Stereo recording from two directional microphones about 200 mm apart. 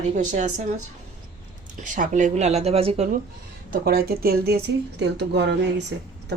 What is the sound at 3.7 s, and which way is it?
Speech, 50° right (ahead or behind).